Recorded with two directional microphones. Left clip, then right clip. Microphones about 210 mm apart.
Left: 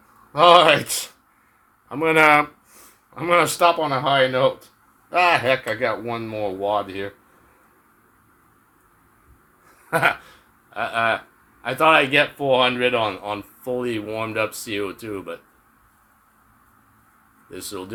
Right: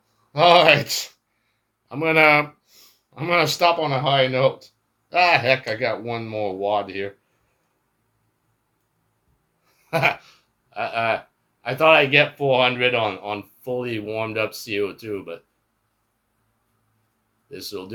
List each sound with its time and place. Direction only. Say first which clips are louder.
0.3 s speech: left 1 dB; 10° left (ahead or behind)
9.9 s speech: left 1 dB; 20° left (ahead or behind)
17.5 s speech: even; 20° left (ahead or behind)